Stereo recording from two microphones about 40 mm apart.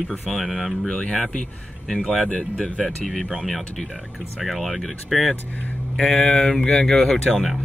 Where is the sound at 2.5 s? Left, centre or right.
Left.